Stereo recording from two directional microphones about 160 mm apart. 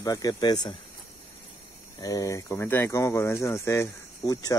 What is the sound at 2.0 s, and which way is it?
Speech, 20° left (ahead or behind).